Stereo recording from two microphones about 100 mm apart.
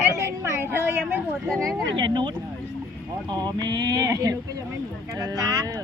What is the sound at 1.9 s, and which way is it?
Speech, 50° right (ahead or behind).